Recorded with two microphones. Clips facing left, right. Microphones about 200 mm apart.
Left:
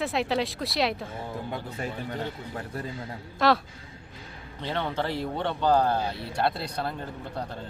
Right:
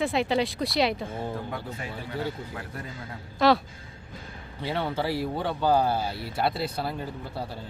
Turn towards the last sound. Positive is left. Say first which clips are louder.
# right 1 dB
turn(degrees=-5)  # may be behind; listen again after turning